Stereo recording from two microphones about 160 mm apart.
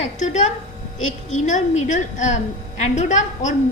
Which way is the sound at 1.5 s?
50° left (ahead or behind).